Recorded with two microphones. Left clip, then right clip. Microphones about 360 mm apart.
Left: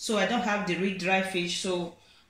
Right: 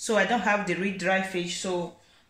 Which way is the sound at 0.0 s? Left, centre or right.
Right.